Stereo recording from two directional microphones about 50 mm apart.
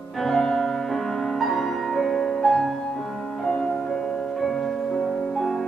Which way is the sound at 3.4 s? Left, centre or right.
Centre.